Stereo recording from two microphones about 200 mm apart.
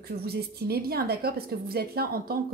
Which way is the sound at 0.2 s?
50° right (ahead or behind).